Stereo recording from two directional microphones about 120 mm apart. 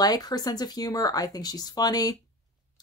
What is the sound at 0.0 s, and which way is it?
Speech, 35° left (ahead or behind).